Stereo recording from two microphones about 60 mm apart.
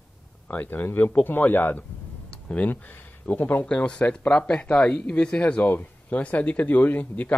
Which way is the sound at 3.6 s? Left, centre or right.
Centre.